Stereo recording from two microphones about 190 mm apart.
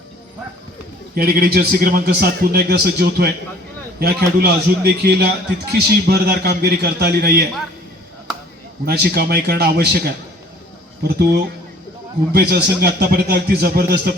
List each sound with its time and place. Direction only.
1.1 s a man's voice: 50° right (ahead or behind)
8.9 s a man's voice: 55° right (ahead or behind)
11.2 s a man's voice: 50° right (ahead or behind)